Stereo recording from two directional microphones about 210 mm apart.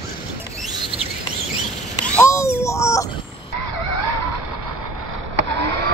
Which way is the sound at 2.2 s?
15° left (ahead or behind).